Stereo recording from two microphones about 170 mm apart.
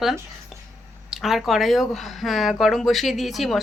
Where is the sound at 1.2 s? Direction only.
Centre (ahead or behind).